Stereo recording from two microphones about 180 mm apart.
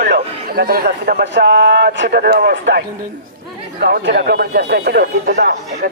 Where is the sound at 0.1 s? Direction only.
60° right (ahead or behind).